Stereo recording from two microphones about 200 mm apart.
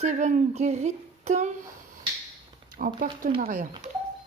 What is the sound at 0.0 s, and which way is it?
A woman's voice, 35° right (ahead or behind).